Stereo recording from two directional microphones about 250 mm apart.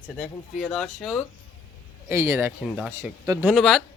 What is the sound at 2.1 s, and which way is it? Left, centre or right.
Speech, centre.